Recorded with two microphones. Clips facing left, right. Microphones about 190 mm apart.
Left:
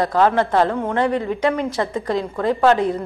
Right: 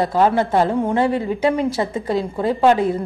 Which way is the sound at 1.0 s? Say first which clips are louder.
Right 1 dB; 25° right (ahead or behind).